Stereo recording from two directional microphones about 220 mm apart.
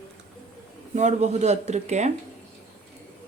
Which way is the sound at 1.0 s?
30° right (ahead or behind).